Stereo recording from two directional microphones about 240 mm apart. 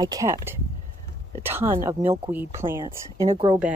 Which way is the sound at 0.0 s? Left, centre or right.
Centre.